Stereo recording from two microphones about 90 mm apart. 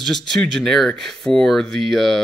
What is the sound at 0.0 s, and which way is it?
Speech, 5° left (ahead or behind).